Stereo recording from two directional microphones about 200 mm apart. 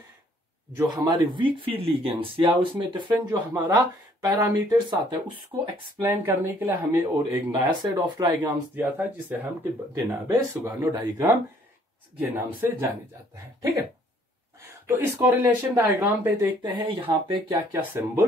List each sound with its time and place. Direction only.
0.7 s speech: 20° right (ahead or behind)
8.9 s speech: 10° right (ahead or behind)
14.6 s speech: 10° right (ahead or behind)
16.6 s speech: 25° right (ahead or behind)
17.5 s speech: 10° right (ahead or behind)